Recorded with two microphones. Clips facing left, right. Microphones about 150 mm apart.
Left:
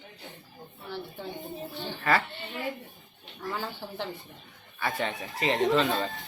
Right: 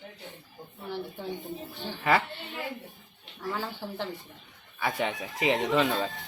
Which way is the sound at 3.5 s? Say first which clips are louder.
Right 1 dB; 5° right (ahead or behind).